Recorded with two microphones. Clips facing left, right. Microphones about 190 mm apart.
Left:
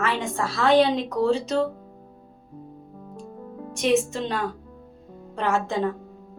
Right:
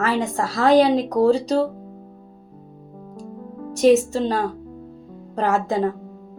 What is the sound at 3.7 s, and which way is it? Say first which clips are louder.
Speech: right 7 dB; 40° right (ahead or behind).